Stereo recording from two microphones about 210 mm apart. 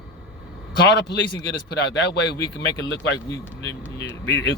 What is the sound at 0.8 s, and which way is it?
Speech, 55° left (ahead or behind).